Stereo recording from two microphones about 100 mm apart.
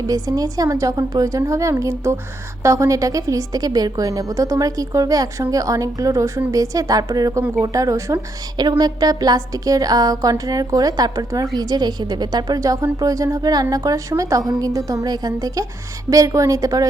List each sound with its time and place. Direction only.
0.1 s a woman's voice: 40° right (ahead or behind)